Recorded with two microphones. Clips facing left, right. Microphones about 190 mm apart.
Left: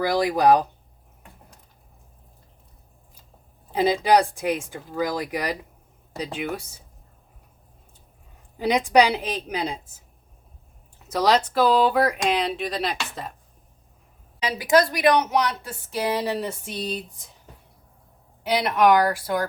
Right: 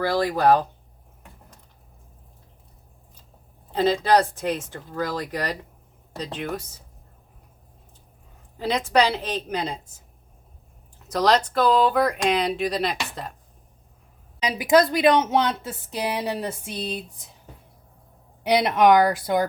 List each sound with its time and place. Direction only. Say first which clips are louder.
0.0 s speech: left 1 dB; 15° left (ahead or behind)
3.7 s speech: even; 10° left (ahead or behind)
8.5 s speech: left 3 dB; 15° left (ahead or behind)
11.1 s speech: even; 5° left (ahead or behind)
14.4 s speech: right 1 dB; 20° right (ahead or behind)
18.4 s speech: right 2 dB; 20° right (ahead or behind)